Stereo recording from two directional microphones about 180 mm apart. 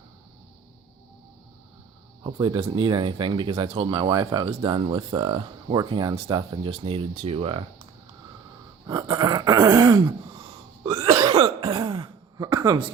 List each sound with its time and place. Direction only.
2.2 s speech: 25° right (ahead or behind)
8.9 s speech: 25° right (ahead or behind)
10.9 s throat clearing: 20° right (ahead or behind)